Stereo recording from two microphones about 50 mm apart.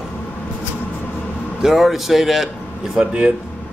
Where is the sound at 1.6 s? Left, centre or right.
Centre.